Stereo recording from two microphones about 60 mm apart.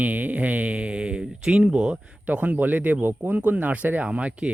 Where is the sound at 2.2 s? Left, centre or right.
Right.